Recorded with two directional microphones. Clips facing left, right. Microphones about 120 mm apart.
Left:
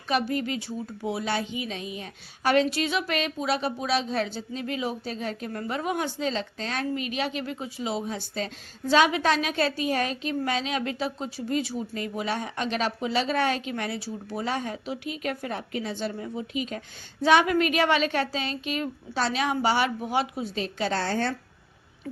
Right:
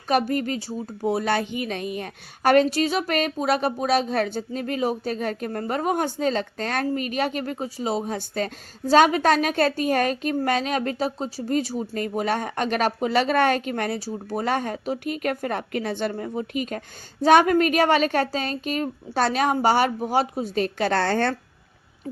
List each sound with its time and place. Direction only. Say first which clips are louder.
0.1 s a woman's voice: right 4 dB; 45° right (ahead or behind)